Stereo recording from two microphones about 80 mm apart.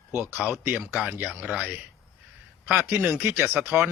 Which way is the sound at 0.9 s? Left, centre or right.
Centre.